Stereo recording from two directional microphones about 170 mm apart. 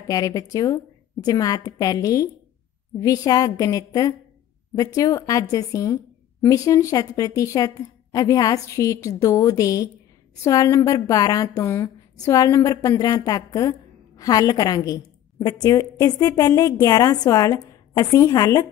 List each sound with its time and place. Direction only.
0.1 s a woman's voice: 20° left (ahead or behind)